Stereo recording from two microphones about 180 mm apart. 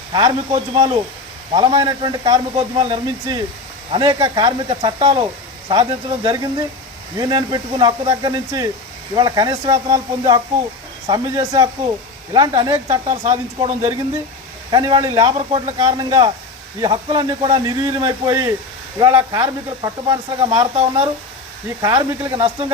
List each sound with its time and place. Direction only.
0.1 s speech: 25° right (ahead or behind)
13.1 s speech: 35° right (ahead or behind)
14.7 s speech: 25° right (ahead or behind)
21.8 s speech: 25° right (ahead or behind)